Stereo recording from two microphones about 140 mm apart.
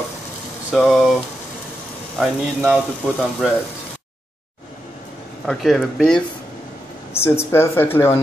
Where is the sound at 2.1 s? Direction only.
5° right (ahead or behind).